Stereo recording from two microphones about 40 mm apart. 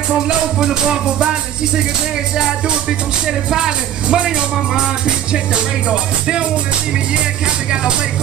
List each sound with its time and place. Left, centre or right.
3.4 s speech: centre
5.0 s music: right